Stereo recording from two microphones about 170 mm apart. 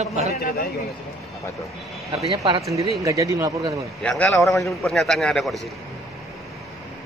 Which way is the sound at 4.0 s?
5° left (ahead or behind).